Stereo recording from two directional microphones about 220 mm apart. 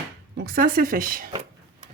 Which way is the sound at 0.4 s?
40° right (ahead or behind).